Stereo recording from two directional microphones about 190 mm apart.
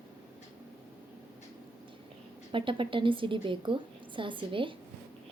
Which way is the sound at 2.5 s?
25° right (ahead or behind).